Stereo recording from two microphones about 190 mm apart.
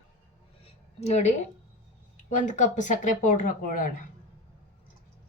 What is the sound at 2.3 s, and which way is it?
Speech, 40° left (ahead or behind).